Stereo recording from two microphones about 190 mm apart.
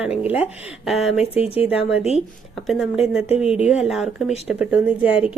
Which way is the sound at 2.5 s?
Centre (ahead or behind).